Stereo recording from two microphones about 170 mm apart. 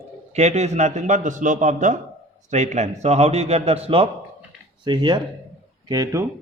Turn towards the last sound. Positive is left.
turn(degrees=-20)  # may be behind; listen again after turning